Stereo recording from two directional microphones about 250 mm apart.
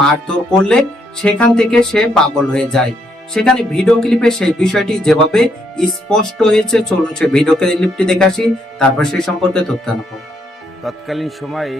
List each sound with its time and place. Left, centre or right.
0.0 s speech: centre